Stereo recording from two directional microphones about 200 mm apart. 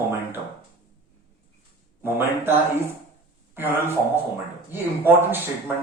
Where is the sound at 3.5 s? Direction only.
10° right (ahead or behind).